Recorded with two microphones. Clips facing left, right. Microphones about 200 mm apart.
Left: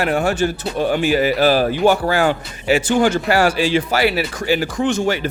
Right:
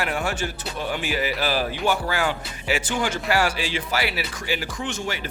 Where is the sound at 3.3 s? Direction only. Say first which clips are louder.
Left 8 dB; 55° left (ahead or behind).